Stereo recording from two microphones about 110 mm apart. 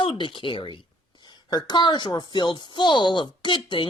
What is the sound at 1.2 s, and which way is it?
Speech, 40° left (ahead or behind).